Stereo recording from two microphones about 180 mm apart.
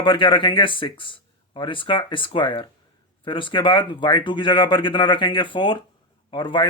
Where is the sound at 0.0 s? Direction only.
25° left (ahead or behind).